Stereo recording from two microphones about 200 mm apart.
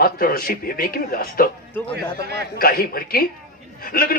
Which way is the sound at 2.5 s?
50° left (ahead or behind).